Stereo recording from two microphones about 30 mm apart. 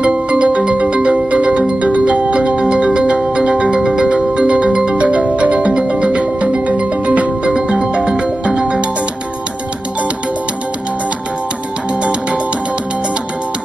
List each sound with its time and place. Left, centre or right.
0.3 s music: right
2.8 s music: right
4.6 s music: right
4.9 s music: right
12.0 s music: right